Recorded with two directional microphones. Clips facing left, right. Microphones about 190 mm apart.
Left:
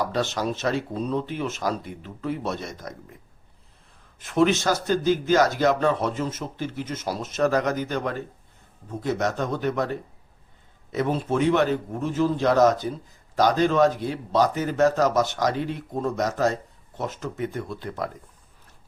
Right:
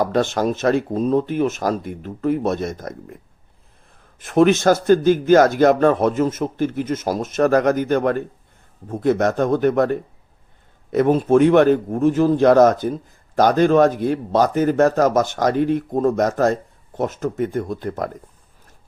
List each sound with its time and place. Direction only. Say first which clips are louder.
0.0 s a man's voice: right 7 dB; 50° right (ahead or behind)
4.2 s a man's voice: right 6 dB; 50° right (ahead or behind)